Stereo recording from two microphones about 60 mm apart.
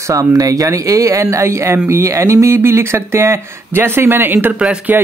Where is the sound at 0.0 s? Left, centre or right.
Right.